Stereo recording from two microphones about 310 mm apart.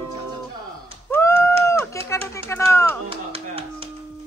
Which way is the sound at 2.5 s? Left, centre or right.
Centre.